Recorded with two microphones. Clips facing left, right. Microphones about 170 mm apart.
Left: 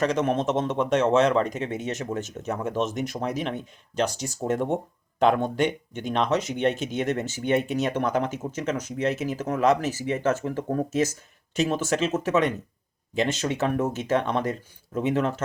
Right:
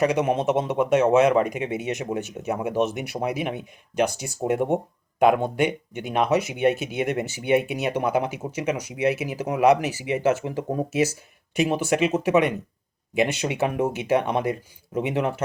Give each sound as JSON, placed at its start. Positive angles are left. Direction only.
{"t": 0.0, "sound": "speech", "side_deg": -10}